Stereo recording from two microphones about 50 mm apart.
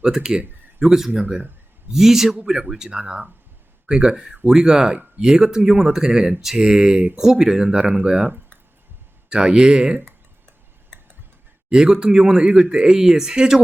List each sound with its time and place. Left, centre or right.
0.0 s speech: centre
1.2 s speech: right
1.9 s speech: centre
9.3 s speech: centre
11.7 s speech: centre